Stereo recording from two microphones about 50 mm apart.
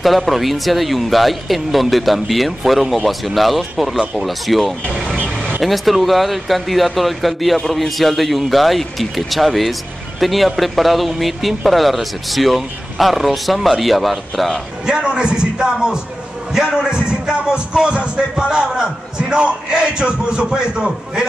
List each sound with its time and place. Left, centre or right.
0.0 s speech: centre
4.0 s speech: centre
4.3 s speech: centre
14.9 s a man's voice: centre